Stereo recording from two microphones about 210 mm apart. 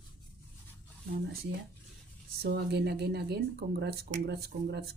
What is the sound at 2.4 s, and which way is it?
Speech, 50° right (ahead or behind).